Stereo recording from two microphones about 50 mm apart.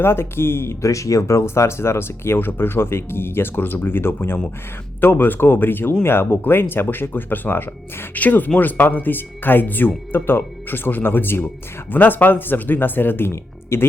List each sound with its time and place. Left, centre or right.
0.0 s speech: left